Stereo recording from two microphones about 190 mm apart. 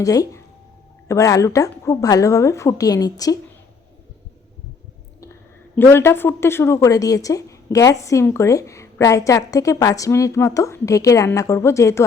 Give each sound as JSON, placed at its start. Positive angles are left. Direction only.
{"t": 0.0, "sound": "a woman's voice", "side_deg": 20}
{"t": 5.7, "sound": "a woman's voice", "side_deg": 10}